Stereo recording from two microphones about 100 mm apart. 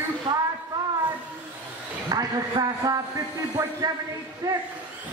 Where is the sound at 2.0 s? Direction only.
40° right (ahead or behind).